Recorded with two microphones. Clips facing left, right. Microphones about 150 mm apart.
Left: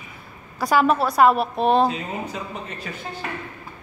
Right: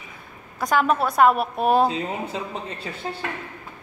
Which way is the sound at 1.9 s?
25° right (ahead or behind).